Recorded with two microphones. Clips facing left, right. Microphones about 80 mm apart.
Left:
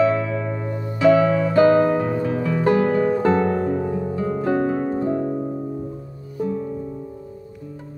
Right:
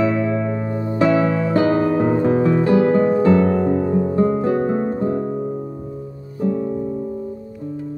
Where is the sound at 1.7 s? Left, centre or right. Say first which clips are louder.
Right 1 dB; right.